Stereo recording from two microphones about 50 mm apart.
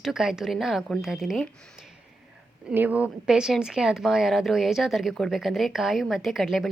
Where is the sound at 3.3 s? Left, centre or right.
Centre.